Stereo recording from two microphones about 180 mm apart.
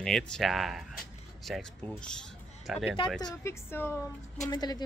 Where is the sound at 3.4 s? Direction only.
15° left (ahead or behind).